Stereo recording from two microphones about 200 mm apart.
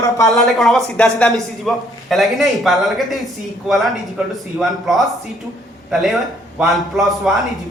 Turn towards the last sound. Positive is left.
turn(degrees=0)  # may be behind; listen again after turning